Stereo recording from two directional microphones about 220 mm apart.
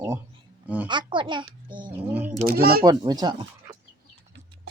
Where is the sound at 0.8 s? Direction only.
20° right (ahead or behind).